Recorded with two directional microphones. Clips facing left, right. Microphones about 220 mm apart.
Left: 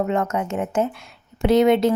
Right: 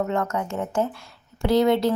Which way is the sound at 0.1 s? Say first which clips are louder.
Left 3 dB; 20° left (ahead or behind).